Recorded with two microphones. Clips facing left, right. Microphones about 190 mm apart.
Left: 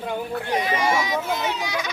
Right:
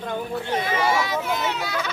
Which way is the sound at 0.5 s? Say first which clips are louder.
Even; 15° left (ahead or behind).